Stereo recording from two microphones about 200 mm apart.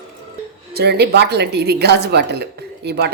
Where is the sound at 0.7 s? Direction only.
55° right (ahead or behind).